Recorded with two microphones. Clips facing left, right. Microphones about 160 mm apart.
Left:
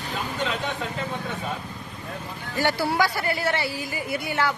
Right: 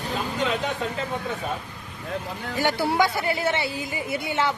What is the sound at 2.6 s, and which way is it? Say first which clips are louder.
Speech: right 1 dB; 15° right (ahead or behind).